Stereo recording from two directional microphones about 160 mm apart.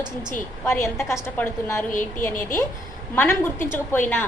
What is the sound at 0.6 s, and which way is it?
A woman's voice, 15° left (ahead or behind).